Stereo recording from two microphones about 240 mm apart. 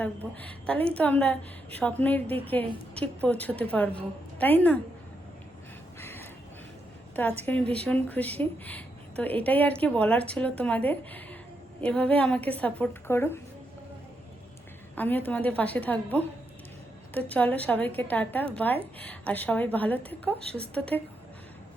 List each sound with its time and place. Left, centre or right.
0.0 s a woman's voice: centre
6.0 s a sound: centre
7.2 s a woman's voice: centre
14.9 s a woman's voice: centre